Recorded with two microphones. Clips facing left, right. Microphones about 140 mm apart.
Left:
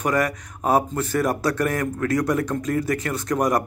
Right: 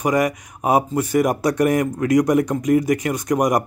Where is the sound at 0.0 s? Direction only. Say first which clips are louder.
Right 3 dB; 15° right (ahead or behind).